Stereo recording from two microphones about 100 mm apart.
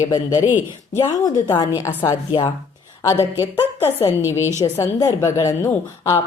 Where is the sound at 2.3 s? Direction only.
45° left (ahead or behind).